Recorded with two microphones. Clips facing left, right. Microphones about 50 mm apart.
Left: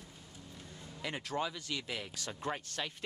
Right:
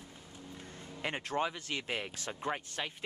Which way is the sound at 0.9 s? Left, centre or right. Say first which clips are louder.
Right 3 dB; right.